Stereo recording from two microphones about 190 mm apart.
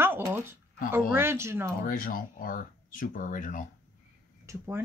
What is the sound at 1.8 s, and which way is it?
Speech, 50° left (ahead or behind).